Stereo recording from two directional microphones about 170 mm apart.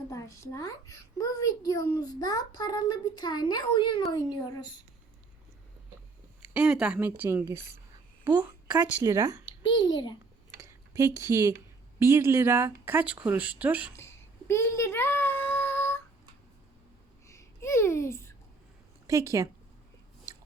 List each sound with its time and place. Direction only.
0.1 s a child's voice: 20° left (ahead or behind)
6.5 s a woman's voice: 5° right (ahead or behind)
9.6 s a child's voice: 25° left (ahead or behind)
10.9 s speech: 20° right (ahead or behind)
13.9 s a sound: 15° left (ahead or behind)
17.2 s babbling: 15° left (ahead or behind)
19.0 s speech: 20° right (ahead or behind)